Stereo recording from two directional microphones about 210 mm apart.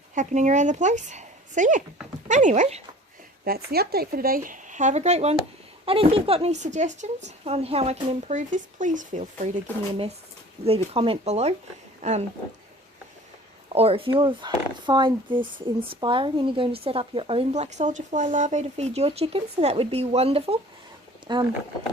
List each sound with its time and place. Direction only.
0.1 s speech: 35° right (ahead or behind)
3.4 s speech: 45° right (ahead or behind)
10.7 s speech: 25° right (ahead or behind)
13.7 s speech: 25° right (ahead or behind)